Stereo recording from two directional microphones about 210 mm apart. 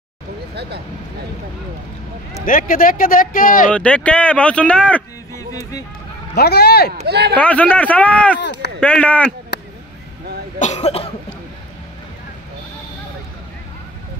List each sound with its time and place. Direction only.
2.4 s speech: 40° left (ahead or behind)
3.7 s speech: 5° left (ahead or behind)
6.3 s speech: 50° left (ahead or behind)
7.1 s speech: 50° right (ahead or behind)
7.3 s speech: 5° left (ahead or behind)
8.4 s speech: 55° left (ahead or behind)
8.7 s speech: 5° left (ahead or behind)
9.5 s a sound: 55° left (ahead or behind)
10.6 s speech: 30° left (ahead or behind)